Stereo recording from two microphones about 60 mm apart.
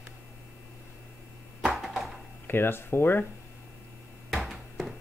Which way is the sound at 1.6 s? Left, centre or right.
Centre.